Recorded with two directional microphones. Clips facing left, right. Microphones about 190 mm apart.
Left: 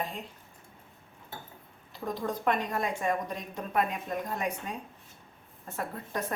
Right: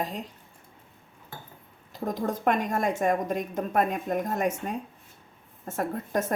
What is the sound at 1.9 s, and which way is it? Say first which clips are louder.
A woman's voice: right 4 dB; 45° right (ahead or behind).